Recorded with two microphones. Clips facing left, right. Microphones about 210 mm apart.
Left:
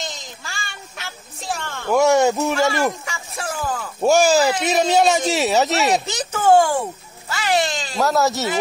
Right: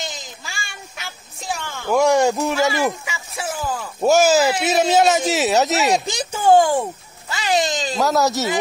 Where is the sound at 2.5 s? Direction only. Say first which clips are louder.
Even; centre (ahead or behind).